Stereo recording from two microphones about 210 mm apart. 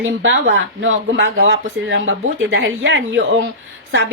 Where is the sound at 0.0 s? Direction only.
65° right (ahead or behind).